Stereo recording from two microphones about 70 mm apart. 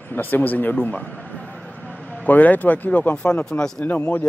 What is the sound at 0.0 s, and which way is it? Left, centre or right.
Speech, left.